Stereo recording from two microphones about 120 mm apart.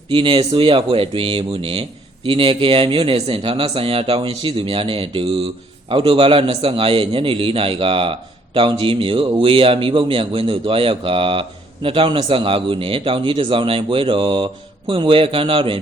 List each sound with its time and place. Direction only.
0.1 s a man's voice: 45° right (ahead or behind)